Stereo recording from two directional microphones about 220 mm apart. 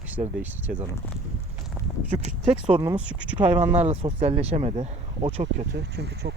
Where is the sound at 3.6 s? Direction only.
30° right (ahead or behind).